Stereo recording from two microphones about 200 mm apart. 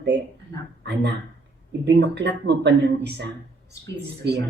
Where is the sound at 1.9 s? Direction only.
60° right (ahead or behind).